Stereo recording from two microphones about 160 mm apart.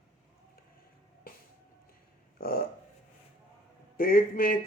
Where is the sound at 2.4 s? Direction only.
65° left (ahead or behind).